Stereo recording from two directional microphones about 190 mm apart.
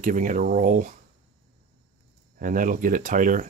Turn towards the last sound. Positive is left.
turn(degrees=-45)  # may be behind; listen again after turning